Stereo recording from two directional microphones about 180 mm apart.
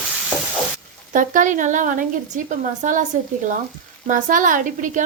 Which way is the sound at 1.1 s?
45° right (ahead or behind).